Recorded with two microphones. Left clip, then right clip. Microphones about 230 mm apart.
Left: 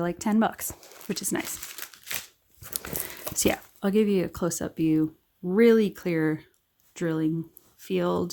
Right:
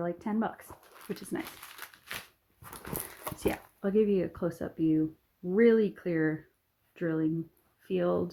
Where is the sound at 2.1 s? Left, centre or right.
Left.